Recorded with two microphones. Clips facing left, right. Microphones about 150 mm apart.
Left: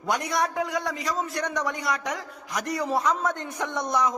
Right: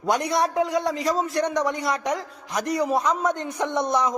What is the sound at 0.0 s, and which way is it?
A man's voice, 25° right (ahead or behind).